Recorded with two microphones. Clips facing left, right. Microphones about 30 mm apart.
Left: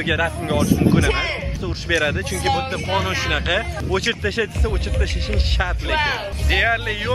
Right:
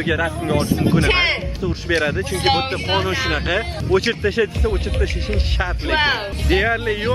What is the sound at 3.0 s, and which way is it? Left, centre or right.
Speech, centre.